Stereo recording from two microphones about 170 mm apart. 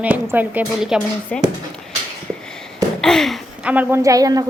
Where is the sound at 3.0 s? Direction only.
5° left (ahead or behind); by 4.4 s 20° right (ahead or behind).